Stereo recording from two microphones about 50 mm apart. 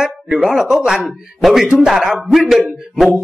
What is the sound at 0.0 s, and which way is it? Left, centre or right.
Speech, centre.